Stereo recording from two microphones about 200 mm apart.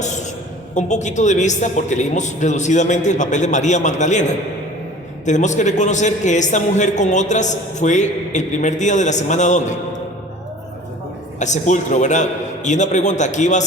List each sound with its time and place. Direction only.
0.7 s a man's voice: 35° left (ahead or behind)
11.3 s a man's voice: 35° left (ahead or behind)